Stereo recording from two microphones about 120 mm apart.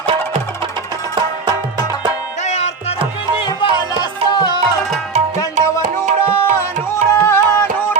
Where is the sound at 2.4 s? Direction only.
70° left (ahead or behind).